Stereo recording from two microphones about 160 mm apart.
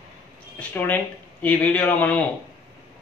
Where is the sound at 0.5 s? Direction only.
10° left (ahead or behind).